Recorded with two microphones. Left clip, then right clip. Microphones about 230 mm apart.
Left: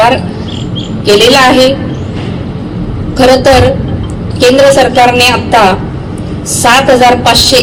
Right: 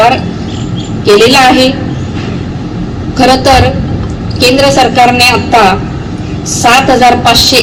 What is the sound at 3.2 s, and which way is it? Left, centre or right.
A woman's voice, left.